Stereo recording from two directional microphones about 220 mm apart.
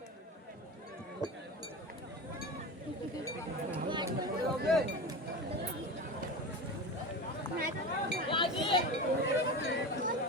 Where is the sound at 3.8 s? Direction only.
20° right (ahead or behind).